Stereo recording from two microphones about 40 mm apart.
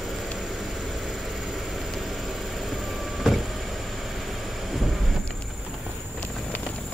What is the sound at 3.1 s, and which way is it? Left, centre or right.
Vehicle, centre.